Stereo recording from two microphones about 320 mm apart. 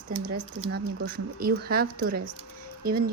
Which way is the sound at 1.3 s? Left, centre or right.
Right.